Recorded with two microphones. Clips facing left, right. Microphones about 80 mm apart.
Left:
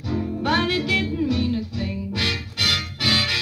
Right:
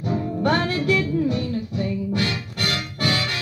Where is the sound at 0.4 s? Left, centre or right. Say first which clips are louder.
Even; right.